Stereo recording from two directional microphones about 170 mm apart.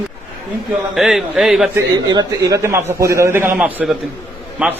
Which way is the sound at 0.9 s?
Centre (ahead or behind).